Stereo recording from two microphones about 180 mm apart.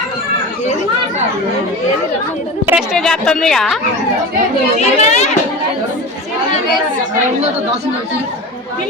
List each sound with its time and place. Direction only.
2.6 s a woman's voice: 5° right (ahead or behind)
4.8 s a child's voice: 40° left (ahead or behind)